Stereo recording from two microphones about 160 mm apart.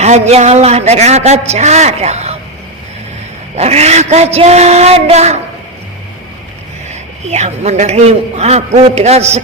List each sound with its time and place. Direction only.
0.0 s a woman's voice: 45° right (ahead or behind)
3.5 s a woman's voice: 40° right (ahead or behind)
7.3 s a woman's voice: 45° right (ahead or behind)